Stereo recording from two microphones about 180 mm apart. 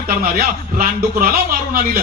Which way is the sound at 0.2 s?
55° right (ahead or behind).